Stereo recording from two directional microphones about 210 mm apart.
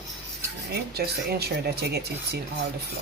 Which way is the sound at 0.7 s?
50° right (ahead or behind).